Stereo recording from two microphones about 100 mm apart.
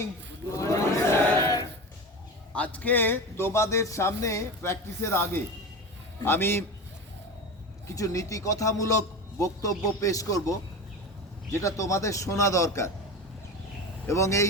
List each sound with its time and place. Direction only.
0.5 s battle cry: 30° left (ahead or behind)
2.6 s a man's voice: 15° left (ahead or behind)
7.9 s a man's voice: 35° left (ahead or behind)
11.6 s a man's voice: 30° left (ahead or behind)
14.1 s a man's voice: 30° left (ahead or behind)